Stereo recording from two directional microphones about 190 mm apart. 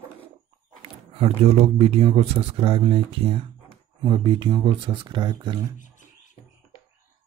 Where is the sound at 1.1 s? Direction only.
30° right (ahead or behind).